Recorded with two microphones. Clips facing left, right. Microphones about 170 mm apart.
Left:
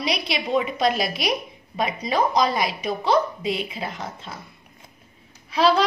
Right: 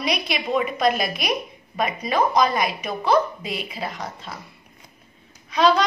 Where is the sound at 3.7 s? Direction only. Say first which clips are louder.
Right 1 dB; centre (ahead or behind).